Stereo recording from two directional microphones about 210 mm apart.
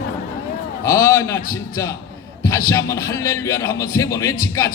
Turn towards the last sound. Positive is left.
turn(degrees=15)  # may be behind; listen again after turning